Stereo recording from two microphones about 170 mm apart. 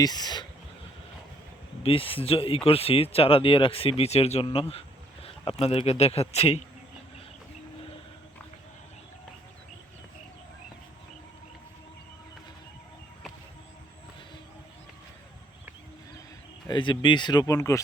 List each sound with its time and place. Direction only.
0.0 s speech: 25° left (ahead or behind)
1.8 s speech: 35° left (ahead or behind)
16.6 s speech: 25° left (ahead or behind)